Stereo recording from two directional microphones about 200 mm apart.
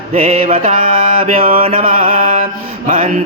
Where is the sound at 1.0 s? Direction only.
45° right (ahead or behind).